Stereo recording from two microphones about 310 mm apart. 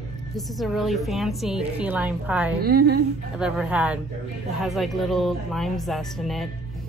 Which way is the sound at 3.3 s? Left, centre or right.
Centre.